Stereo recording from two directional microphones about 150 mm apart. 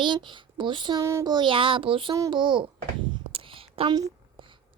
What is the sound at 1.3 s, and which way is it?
Speech, 35° right (ahead or behind).